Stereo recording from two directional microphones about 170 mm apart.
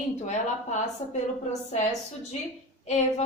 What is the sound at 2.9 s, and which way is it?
Speech, 40° left (ahead or behind).